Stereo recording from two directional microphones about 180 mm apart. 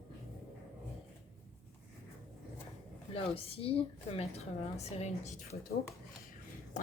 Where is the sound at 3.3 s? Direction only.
30° left (ahead or behind).